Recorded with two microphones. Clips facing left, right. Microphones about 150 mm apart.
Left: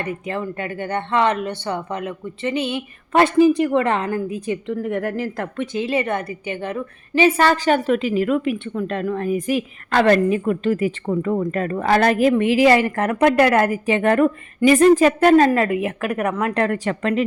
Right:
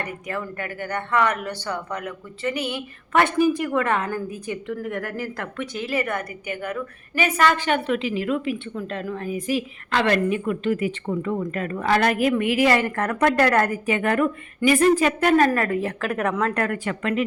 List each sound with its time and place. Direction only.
0.0 s a woman's voice: 25° left (ahead or behind)
13.8 s a woman's voice: 30° left (ahead or behind)
15.4 s speech: 20° left (ahead or behind)
16.0 s speech: 10° left (ahead or behind)
16.6 s a woman's voice: 35° left (ahead or behind)